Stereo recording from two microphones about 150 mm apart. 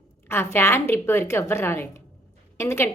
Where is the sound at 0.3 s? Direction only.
15° left (ahead or behind).